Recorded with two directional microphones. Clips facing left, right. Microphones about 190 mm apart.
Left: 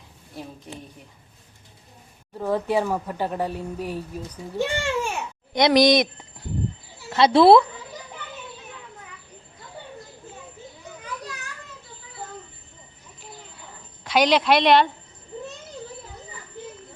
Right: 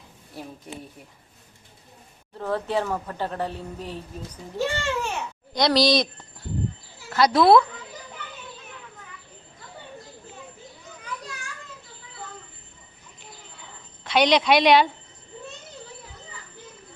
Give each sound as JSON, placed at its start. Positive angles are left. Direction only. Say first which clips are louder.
{"t": 2.4, "sound": "a woman's voice", "louder": "left 3 dB", "side_deg": 10}
{"t": 7.1, "sound": "speech", "louder": "left 3 dB", "side_deg": 25}
{"t": 14.0, "sound": "speech", "louder": "even", "side_deg": 5}